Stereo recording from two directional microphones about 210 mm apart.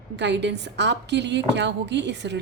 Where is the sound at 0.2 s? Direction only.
55° right (ahead or behind).